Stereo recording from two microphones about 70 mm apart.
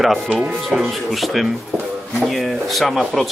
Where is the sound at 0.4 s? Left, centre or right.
Centre.